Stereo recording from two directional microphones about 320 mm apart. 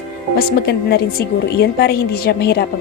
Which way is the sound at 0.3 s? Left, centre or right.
Left.